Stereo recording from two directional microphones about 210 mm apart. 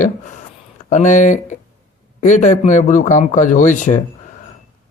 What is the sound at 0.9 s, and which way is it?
Speech, 35° left (ahead or behind).